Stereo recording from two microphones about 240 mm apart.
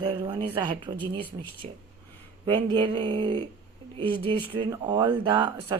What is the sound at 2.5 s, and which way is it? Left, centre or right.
Speech, centre.